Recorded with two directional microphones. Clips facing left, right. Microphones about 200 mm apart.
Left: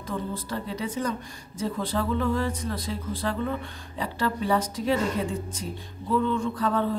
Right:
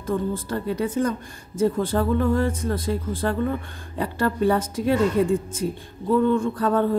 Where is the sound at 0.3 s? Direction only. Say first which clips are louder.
Right 6 dB; 50° right (ahead or behind).